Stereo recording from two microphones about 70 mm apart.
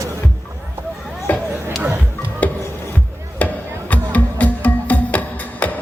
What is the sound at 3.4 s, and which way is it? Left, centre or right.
Chop, left.